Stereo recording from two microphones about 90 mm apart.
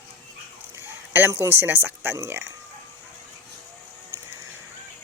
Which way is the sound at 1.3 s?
30° right (ahead or behind).